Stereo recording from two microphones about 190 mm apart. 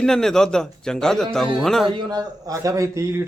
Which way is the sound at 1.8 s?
20° right (ahead or behind).